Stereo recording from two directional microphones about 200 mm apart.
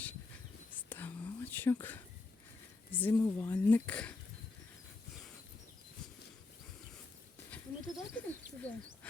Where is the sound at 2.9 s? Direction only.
10° left (ahead or behind).